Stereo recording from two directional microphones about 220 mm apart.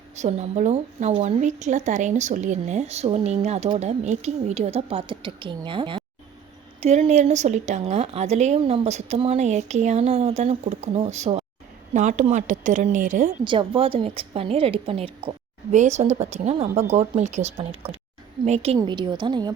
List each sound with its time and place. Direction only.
0.2 s a woman's voice: 30° right (ahead or behind)
13.4 s a woman's voice: 20° right (ahead or behind)